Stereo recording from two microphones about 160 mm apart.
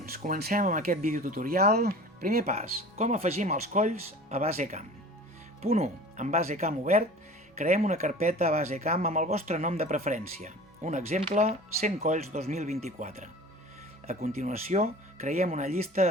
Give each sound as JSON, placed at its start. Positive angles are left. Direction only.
{"t": 0.3, "sound": "speech", "side_deg": -70}
{"t": 2.5, "sound": "speech", "side_deg": -45}